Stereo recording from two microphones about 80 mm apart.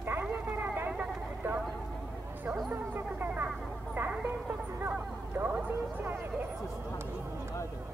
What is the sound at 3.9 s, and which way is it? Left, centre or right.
Music, right.